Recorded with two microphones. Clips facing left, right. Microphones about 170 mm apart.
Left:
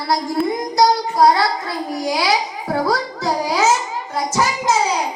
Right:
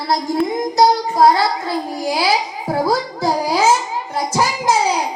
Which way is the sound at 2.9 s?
30° right (ahead or behind).